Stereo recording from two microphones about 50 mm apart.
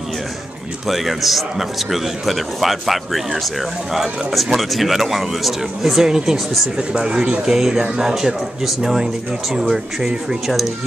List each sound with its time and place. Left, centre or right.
0.8 s a man's voice: centre